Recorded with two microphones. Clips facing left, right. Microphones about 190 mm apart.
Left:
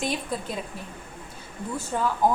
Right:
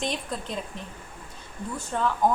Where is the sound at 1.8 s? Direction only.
5° left (ahead or behind).